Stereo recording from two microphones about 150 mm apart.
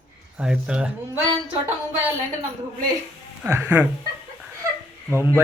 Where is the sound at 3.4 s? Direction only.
15° right (ahead or behind).